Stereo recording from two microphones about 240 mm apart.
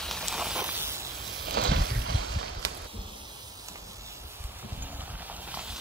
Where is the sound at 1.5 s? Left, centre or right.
Right.